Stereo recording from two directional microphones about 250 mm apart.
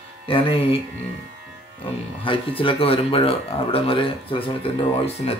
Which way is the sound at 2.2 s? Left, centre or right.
Left.